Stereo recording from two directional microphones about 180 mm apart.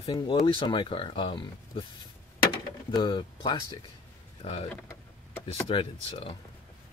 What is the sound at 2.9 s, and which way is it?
Speech, 25° left (ahead or behind).